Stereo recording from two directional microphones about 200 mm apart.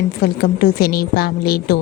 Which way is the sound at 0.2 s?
50° left (ahead or behind).